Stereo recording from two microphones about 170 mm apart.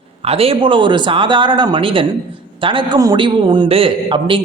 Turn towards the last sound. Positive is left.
turn(degrees=-30)  # may be behind; listen again after turning